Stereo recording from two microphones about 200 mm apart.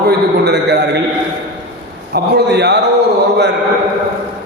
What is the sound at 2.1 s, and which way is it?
Speech, 55° right (ahead or behind).